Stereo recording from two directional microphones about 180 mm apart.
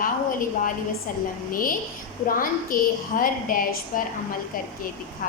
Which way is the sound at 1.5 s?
50° left (ahead or behind).